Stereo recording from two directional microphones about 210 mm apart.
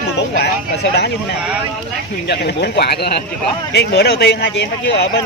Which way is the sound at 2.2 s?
55° left (ahead or behind).